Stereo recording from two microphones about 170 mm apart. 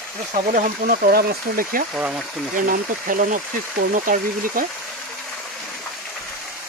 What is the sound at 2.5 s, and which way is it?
Speech, 55° right (ahead or behind).